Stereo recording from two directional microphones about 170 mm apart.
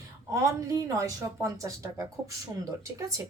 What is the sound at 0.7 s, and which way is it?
A woman's voice, 20° right (ahead or behind).